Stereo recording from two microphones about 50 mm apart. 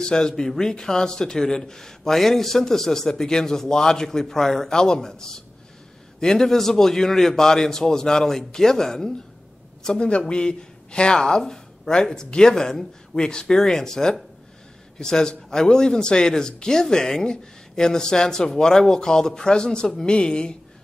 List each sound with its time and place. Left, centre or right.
0.0 s speech: centre
9.8 s a woman's voice: centre